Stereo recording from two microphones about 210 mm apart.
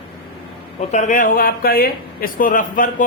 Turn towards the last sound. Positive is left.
turn(degrees=40)  # may be behind; listen again after turning